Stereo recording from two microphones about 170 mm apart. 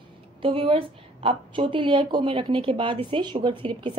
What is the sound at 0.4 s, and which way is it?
A woman's voice, 30° right (ahead or behind).